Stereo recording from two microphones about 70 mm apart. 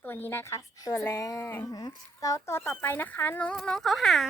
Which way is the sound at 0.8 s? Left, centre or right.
Left.